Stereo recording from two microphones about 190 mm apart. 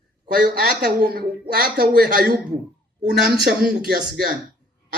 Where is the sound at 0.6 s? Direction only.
50° right (ahead or behind).